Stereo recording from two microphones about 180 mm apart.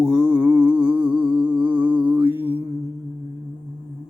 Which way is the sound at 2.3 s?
10° right (ahead or behind).